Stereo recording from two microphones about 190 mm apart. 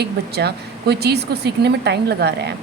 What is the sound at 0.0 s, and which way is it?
Speech, 60° right (ahead or behind).